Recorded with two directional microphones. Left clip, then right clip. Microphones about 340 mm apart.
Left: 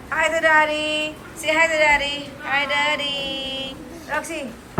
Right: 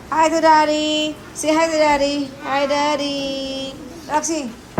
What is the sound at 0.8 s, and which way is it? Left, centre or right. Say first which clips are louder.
Speech: right 3 dB; centre.